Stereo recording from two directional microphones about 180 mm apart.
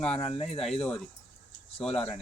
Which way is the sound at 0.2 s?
30° left (ahead or behind).